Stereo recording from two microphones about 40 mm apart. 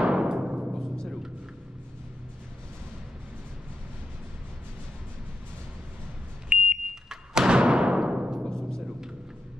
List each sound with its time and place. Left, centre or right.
0.0 s timpani: right
6.5 s smoke detector: right
7.1 s a sound: centre
8.5 s timpani: centre